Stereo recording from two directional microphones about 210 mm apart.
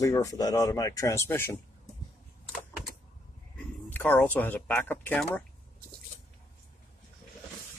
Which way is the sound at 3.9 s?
10° left (ahead or behind).